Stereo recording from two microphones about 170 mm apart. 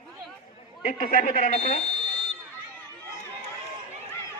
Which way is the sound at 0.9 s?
50° left (ahead or behind).